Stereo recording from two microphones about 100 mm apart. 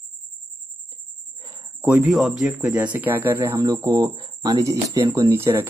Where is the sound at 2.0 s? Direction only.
5° right (ahead or behind).